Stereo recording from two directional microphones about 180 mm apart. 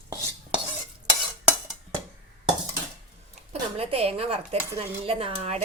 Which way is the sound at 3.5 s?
35° right (ahead or behind).